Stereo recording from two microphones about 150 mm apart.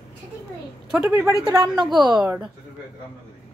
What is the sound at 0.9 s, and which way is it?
A woman's voice, 10° right (ahead or behind).